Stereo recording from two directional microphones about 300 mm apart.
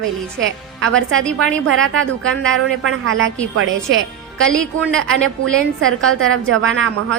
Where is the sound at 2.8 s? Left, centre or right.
Right.